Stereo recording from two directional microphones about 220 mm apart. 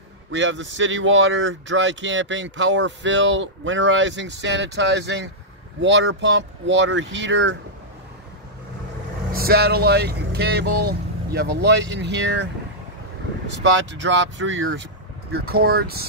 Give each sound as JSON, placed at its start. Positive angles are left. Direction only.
{"t": 0.3, "sound": "speech", "side_deg": -55}
{"t": 9.3, "sound": "speech", "side_deg": -45}
{"t": 13.5, "sound": "speech", "side_deg": -55}
{"t": 15.3, "sound": "speech", "side_deg": -45}